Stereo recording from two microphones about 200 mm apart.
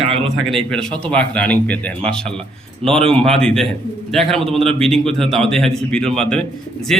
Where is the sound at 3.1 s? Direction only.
5° left (ahead or behind).